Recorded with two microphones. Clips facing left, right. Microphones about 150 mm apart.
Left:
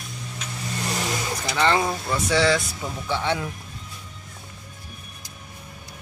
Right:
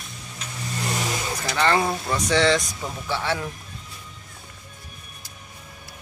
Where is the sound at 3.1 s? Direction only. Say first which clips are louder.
Left 1 dB; 15° left (ahead or behind).